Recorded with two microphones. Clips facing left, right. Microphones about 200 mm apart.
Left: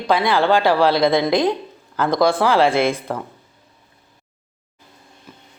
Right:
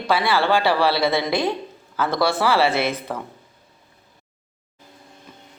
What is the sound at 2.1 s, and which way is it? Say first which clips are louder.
A man's voice: left 4 dB; 15° left (ahead or behind).